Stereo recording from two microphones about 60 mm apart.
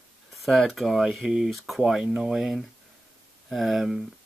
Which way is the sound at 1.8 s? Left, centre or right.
Centre.